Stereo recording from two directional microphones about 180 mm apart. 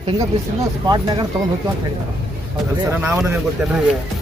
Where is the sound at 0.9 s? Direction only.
25° right (ahead or behind).